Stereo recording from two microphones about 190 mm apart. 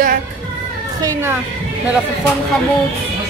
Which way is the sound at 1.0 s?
10° right (ahead or behind).